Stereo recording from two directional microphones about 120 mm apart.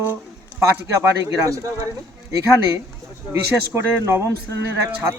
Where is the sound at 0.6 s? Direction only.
25° right (ahead or behind).